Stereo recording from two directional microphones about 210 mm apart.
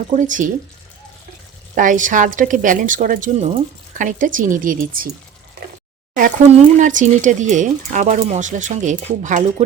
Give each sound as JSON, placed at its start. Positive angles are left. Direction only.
{"t": 0.1, "sound": "a woman's voice", "side_deg": -35}
{"t": 1.7, "sound": "a woman's voice", "side_deg": -40}
{"t": 6.7, "sound": "a woman's voice", "side_deg": -35}